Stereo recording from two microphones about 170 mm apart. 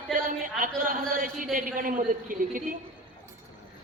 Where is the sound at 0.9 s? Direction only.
55° right (ahead or behind).